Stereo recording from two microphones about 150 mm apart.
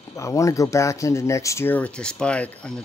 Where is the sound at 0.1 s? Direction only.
20° left (ahead or behind).